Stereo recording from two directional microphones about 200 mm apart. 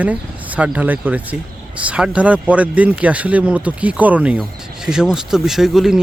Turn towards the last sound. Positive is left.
turn(degrees=0)  # may be behind; listen again after turning